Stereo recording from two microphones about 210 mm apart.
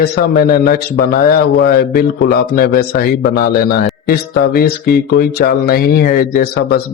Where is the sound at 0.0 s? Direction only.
45° left (ahead or behind).